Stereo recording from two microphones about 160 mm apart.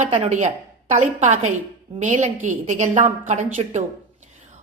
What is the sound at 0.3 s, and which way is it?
A woman's voice, 50° right (ahead or behind).